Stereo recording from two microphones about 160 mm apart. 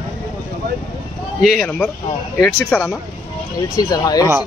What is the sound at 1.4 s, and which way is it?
A man's voice, centre (ahead or behind).